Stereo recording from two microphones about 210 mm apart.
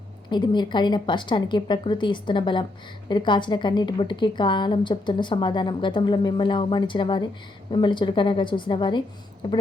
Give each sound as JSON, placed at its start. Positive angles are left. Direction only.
{"t": 0.3, "sound": "a woman's voice", "side_deg": 20}